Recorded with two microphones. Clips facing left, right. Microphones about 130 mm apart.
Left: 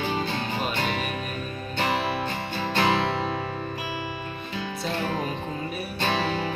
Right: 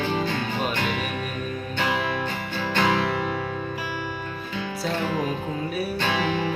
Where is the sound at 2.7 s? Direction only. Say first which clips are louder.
Right 1 dB; 30° left (ahead or behind).